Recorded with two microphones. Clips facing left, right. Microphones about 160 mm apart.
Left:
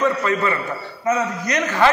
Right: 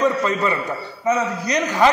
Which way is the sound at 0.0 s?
20° right (ahead or behind).